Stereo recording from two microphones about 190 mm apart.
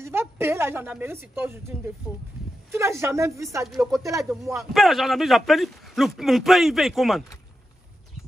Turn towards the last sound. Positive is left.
turn(degrees=0)  # may be behind; listen again after turning